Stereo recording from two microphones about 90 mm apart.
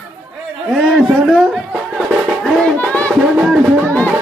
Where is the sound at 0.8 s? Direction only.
Centre (ahead or behind).